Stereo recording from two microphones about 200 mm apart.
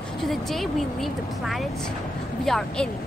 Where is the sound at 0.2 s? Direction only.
Centre (ahead or behind).